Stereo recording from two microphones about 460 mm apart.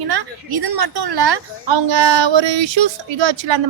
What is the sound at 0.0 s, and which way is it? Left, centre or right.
A woman's voice, right.